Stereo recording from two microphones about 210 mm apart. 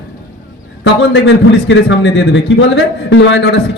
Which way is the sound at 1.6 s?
60° left (ahead or behind).